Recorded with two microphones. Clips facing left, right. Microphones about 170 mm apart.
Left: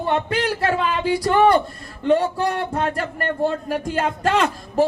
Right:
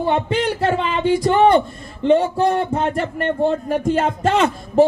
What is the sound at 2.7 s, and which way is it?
Speech, centre (ahead or behind).